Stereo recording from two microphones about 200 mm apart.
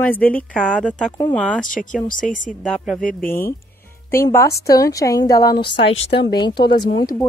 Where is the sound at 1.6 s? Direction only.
40° left (ahead or behind).